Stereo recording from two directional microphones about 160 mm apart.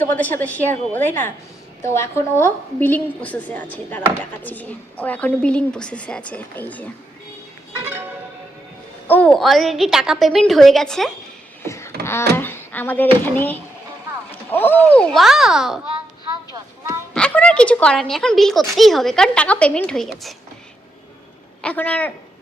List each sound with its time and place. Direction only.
0.0 s a woman's voice: 10° left (ahead or behind)
9.0 s speech: 10° left (ahead or behind)
11.6 s wail: 15° left (ahead or behind)
12.4 s speech: 15° left (ahead or behind); by 15.8 s 5° right (ahead or behind)
17.2 s speech: 5° left (ahead or behind)
21.6 s a woman's voice: 10° left (ahead or behind)